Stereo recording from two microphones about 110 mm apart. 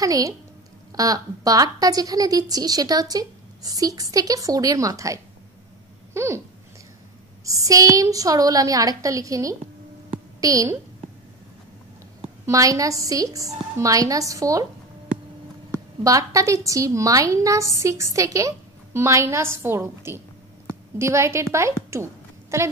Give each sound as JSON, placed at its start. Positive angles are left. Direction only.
{"t": 0.0, "sound": "a woman's voice", "side_deg": -30}
{"t": 7.4, "sound": "a woman's voice", "side_deg": -30}
{"t": 12.4, "sound": "a woman's voice", "side_deg": -30}
{"t": 15.7, "sound": "a woman's voice", "side_deg": -30}